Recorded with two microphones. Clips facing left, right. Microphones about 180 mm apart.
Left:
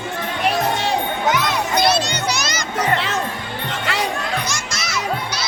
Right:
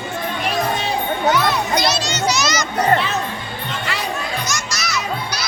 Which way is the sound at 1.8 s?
55° left (ahead or behind).